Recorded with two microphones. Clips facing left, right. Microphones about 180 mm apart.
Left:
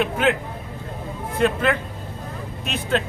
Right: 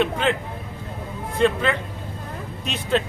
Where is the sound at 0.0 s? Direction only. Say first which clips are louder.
Left 1 dB; 5° left (ahead or behind).